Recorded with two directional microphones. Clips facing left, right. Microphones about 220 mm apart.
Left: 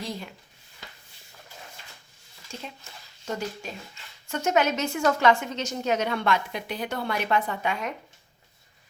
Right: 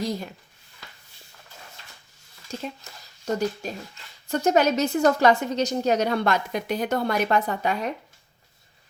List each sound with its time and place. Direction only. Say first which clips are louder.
0.0 s a woman's voice: right 6 dB; 40° right (ahead or behind)
2.5 s a woman's voice: right 6 dB; 40° right (ahead or behind)